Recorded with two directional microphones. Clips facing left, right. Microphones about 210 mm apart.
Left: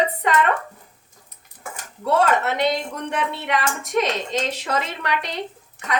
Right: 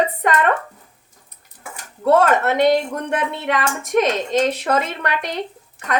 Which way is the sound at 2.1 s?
50° right (ahead or behind).